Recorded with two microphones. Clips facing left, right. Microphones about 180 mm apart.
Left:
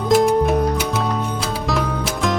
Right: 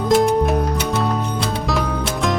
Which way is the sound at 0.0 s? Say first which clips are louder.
Even; centre (ahead or behind).